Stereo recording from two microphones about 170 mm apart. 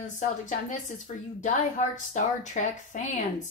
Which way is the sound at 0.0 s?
45° left (ahead or behind).